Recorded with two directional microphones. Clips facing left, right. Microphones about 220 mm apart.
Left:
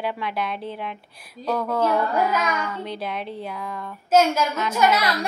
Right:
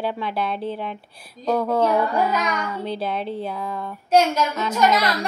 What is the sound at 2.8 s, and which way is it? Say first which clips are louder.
A child's voice: right 4 dB; 30° right (ahead or behind).